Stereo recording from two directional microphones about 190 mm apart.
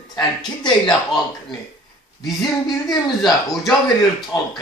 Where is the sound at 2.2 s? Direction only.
Centre (ahead or behind).